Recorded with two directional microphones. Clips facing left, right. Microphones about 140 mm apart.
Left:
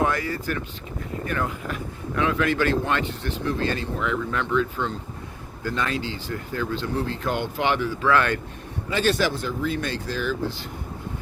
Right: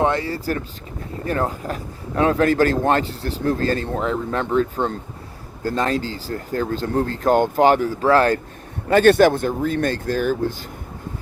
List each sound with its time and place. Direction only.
0.0 s speech: 25° right (ahead or behind)
8.9 s speech: 55° right (ahead or behind)